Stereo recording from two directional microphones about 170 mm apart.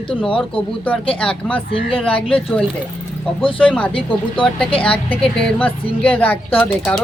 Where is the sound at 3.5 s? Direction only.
30° left (ahead or behind).